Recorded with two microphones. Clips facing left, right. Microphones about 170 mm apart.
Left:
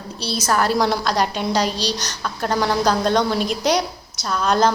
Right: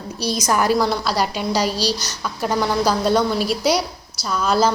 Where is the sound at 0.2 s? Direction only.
15° right (ahead or behind).